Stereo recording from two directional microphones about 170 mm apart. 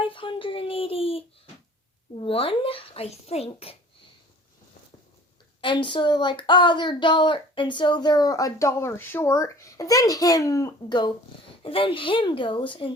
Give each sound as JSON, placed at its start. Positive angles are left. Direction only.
{"t": 0.0, "sound": "a sound", "side_deg": 30}
{"t": 2.1, "sound": "a child's voice", "side_deg": 35}
{"t": 5.6, "sound": "speech", "side_deg": 30}